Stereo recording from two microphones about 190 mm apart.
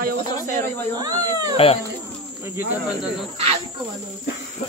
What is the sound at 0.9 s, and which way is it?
Speech, 20° right (ahead or behind).